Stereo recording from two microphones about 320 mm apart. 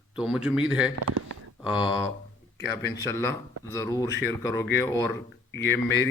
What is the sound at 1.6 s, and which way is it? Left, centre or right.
Speech, centre.